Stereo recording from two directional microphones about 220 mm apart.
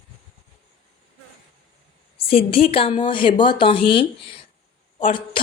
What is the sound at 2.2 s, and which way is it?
A woman's voice, 25° left (ahead or behind).